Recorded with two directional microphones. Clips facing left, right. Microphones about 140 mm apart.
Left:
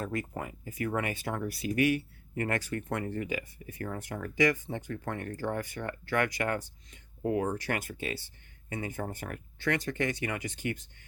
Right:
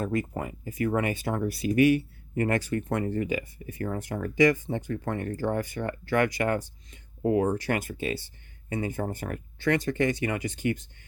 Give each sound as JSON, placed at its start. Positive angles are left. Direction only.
{"t": 0.0, "sound": "speech", "side_deg": -25}